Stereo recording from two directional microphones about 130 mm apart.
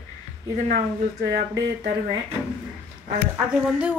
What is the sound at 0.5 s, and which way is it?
Speech, 75° right (ahead or behind).